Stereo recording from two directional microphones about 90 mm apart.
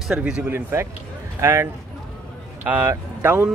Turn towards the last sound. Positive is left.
turn(degrees=-25)  # may be behind; listen again after turning